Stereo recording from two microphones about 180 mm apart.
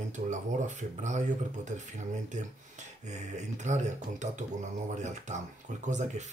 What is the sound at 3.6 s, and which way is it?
Speech, 40° right (ahead or behind).